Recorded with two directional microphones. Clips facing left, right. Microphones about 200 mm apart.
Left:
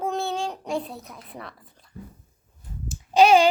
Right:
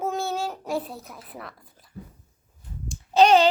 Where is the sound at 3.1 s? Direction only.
10° left (ahead or behind).